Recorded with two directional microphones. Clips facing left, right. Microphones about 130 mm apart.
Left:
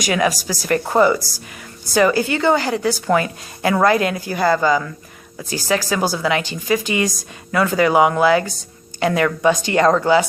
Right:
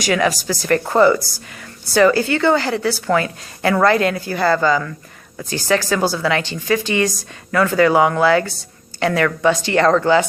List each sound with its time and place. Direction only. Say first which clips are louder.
0.0 s a woman's voice: right 1 dB; 15° left (ahead or behind)